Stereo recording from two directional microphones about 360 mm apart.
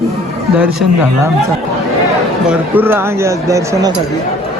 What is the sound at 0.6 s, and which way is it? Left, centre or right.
Speech, centre.